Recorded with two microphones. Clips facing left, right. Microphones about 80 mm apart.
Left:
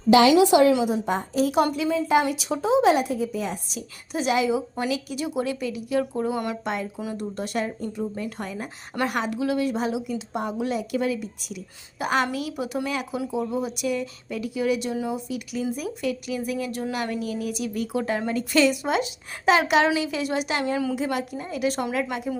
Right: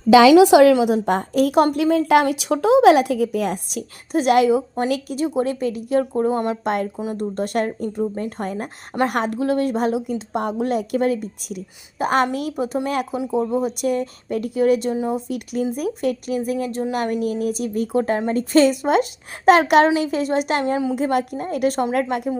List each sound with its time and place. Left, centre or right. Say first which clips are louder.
0.3 s a woman's voice: right 6 dB; right
0.7 s a woman's voice: right 5 dB; right
4.9 s speech: right 6 dB; right
6.7 s a woman's voice: right 6 dB; right
12.9 s a woman's voice: right 6 dB; right